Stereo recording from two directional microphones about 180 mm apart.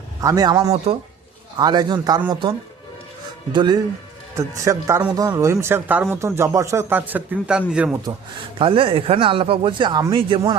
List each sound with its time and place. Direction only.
0.2 s a man's voice: 20° right (ahead or behind); by 7.9 s 5° right (ahead or behind)
8.5 s speech: 30° right (ahead or behind)